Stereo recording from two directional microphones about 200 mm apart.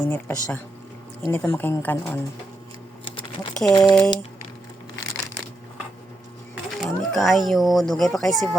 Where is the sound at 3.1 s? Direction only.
25° left (ahead or behind).